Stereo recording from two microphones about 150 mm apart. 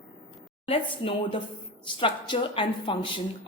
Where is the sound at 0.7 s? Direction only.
35° left (ahead or behind).